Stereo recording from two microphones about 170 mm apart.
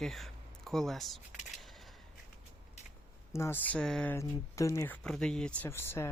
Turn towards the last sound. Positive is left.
turn(degrees=15)  # may be behind; listen again after turning